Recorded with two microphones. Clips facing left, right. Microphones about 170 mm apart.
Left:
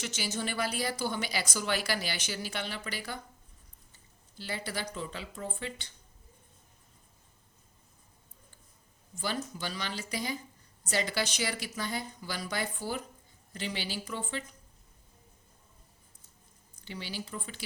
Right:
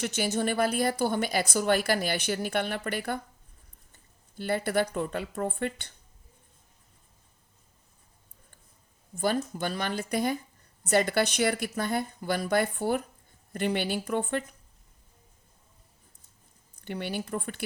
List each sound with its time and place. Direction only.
0.0 s a woman's voice: 55° right (ahead or behind)
9.1 s a woman's voice: 50° right (ahead or behind)
16.8 s a woman's voice: 55° right (ahead or behind)